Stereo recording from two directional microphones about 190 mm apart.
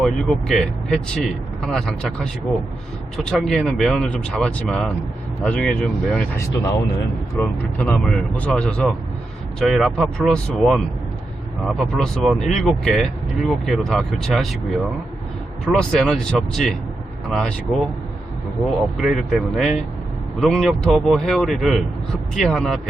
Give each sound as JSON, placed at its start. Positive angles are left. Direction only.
{"t": 0.0, "sound": "speech", "side_deg": 0}
{"t": 15.6, "sound": "speech", "side_deg": 5}
{"t": 18.9, "sound": "speech", "side_deg": 0}